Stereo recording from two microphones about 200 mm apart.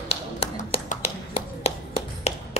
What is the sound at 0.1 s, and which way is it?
Tap, 30° left (ahead or behind).